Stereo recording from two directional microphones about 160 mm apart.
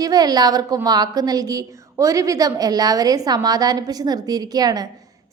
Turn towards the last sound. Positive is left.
turn(degrees=-25)  # may be behind; listen again after turning